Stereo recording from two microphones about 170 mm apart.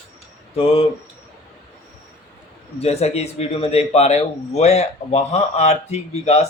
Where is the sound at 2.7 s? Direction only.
40° left (ahead or behind).